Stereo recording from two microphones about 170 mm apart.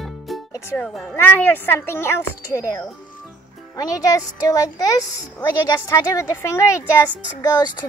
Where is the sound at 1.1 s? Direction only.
15° left (ahead or behind).